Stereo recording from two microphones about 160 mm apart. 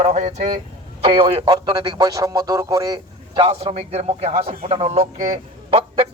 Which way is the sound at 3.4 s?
35° right (ahead or behind).